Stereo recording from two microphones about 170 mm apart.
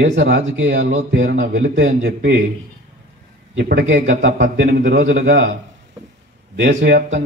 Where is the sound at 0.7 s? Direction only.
50° right (ahead or behind).